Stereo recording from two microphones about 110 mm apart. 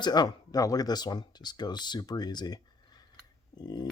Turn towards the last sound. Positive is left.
turn(degrees=40)  # may be behind; listen again after turning